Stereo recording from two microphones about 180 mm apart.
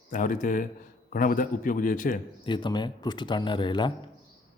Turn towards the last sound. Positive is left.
turn(degrees=25)  # may be behind; listen again after turning